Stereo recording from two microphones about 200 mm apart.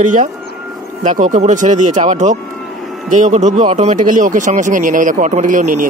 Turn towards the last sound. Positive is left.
turn(degrees=-40)  # may be behind; listen again after turning